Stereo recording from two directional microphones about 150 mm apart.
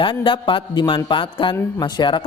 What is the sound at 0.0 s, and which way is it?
A man's voice, 35° left (ahead or behind).